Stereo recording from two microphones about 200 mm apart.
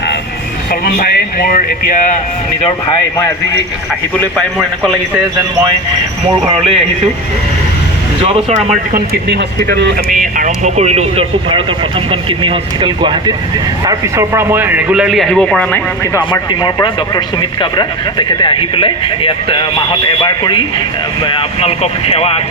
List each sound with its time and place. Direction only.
0.7 s speech: 45° left (ahead or behind)
4.4 s a man's voice: centre (ahead or behind)
8.2 s speech: 30° right (ahead or behind)
9.3 s speech: 60° right (ahead or behind)
10.3 s a man's voice: 35° right (ahead or behind); by 15.8 s 5° left (ahead or behind)
16.1 s a man's voice: 20° left (ahead or behind)